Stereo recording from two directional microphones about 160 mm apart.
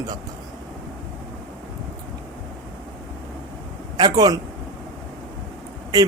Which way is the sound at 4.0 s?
25° right (ahead or behind).